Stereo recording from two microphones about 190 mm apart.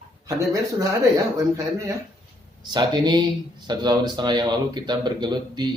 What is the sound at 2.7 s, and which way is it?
Speech, 20° right (ahead or behind).